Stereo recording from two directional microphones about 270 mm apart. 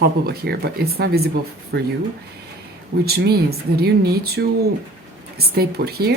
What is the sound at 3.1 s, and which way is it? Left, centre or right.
Speech, right.